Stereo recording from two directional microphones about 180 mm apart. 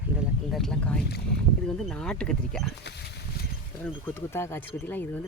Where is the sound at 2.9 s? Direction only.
70° left (ahead or behind).